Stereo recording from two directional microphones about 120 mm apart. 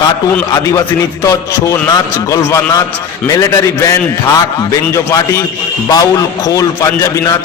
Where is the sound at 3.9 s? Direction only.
25° left (ahead or behind).